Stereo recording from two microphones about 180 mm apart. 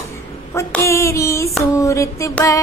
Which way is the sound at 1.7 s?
15° left (ahead or behind).